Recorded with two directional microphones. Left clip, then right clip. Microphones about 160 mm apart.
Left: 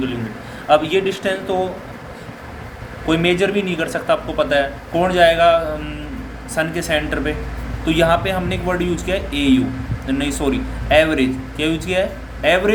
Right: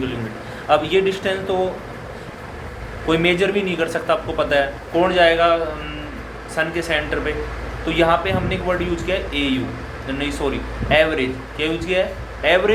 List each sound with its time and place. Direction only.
0.7 s a man's voice: 45° left (ahead or behind)
3.1 s a man's voice: 45° left (ahead or behind)